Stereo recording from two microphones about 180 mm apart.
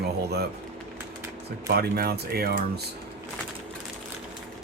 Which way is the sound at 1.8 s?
60° right (ahead or behind).